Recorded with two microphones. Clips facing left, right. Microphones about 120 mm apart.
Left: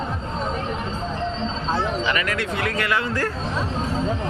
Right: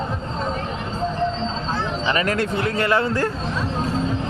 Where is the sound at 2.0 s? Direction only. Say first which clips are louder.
Right 3 dB; 30° right (ahead or behind).